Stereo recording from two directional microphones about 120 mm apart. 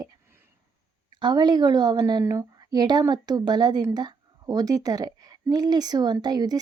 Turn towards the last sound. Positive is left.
turn(degrees=-35)  # may be behind; listen again after turning